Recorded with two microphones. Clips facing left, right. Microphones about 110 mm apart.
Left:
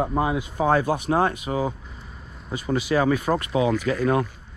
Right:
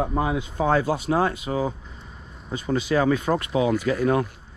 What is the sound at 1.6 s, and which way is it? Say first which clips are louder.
Vehicle: even; 5° left (ahead or behind).